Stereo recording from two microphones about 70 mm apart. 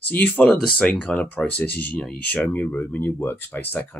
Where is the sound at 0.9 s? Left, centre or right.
Left.